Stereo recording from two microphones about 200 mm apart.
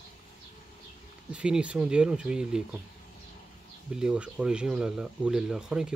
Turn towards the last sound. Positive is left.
turn(degrees=-5)  # may be behind; listen again after turning